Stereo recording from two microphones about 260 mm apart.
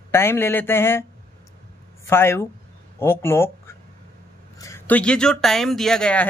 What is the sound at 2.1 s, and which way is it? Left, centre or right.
A man's voice, centre.